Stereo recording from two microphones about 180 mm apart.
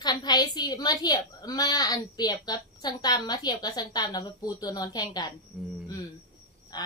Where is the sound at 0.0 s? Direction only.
25° left (ahead or behind).